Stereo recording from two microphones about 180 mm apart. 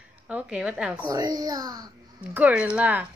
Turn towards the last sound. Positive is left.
turn(degrees=-10)  # may be behind; listen again after turning